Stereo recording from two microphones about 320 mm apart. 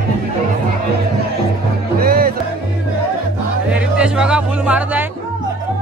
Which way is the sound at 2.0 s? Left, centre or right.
Right.